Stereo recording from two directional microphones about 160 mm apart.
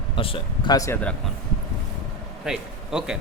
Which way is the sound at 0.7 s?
20° left (ahead or behind).